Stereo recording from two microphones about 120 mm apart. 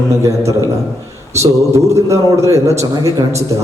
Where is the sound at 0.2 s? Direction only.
25° right (ahead or behind).